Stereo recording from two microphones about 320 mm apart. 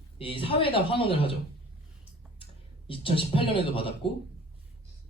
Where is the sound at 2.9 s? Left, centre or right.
Centre.